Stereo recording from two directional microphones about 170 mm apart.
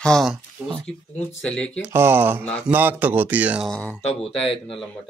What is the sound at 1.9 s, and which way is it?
Speech, 15° right (ahead or behind).